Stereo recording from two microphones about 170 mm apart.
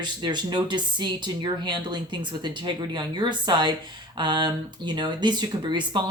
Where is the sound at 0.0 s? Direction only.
25° right (ahead or behind).